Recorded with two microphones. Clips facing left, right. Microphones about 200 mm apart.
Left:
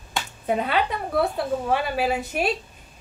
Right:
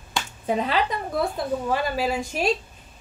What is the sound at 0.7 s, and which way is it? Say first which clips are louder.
Speech: left 1 dB; 65° left (ahead or behind).